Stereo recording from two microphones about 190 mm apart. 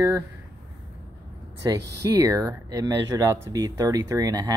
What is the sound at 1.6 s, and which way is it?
Speech, 20° right (ahead or behind).